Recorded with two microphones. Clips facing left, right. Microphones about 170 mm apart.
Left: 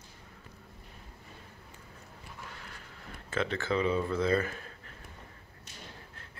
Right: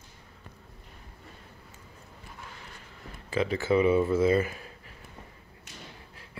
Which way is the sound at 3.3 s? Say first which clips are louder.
Right 6 dB; 5° right (ahead or behind).